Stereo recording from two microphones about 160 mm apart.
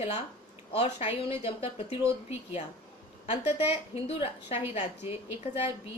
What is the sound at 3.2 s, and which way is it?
A woman's voice, 40° left (ahead or behind).